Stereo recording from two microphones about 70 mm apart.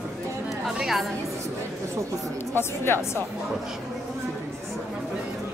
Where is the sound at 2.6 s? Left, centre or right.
Left.